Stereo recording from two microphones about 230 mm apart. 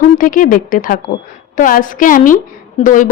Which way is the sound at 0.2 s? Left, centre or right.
Left.